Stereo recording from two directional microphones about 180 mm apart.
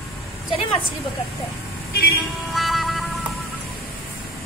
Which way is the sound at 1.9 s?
60° left (ahead or behind).